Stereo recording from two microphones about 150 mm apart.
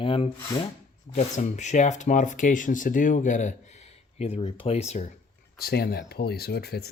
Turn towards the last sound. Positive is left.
turn(degrees=90)